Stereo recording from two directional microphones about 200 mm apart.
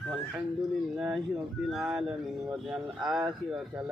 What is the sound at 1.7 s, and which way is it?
Mantra, 5° right (ahead or behind).